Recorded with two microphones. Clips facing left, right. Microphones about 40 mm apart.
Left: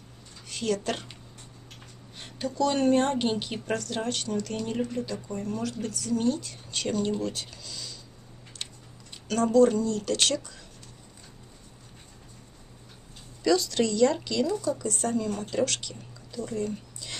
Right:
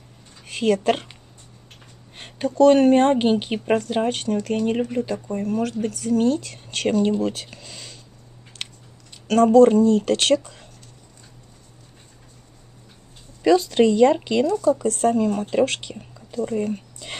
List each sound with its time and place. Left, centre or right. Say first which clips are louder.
0.5 s speech: right 9 dB; right
2.1 s a woman's voice: right 10 dB; right
7.0 s speech: right 8 dB; right
8.5 s a sound: right 5 dB; right
9.3 s a woman's voice: right 8 dB; right
13.4 s a woman's voice: right 8 dB; right
14.7 s a woman's voice: right 9 dB; right